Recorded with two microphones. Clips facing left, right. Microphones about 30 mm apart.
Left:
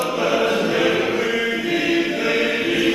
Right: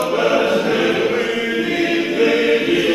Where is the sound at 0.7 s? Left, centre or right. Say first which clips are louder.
Right 2 dB; centre.